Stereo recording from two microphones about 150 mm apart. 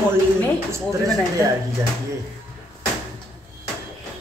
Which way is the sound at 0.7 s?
25° right (ahead or behind).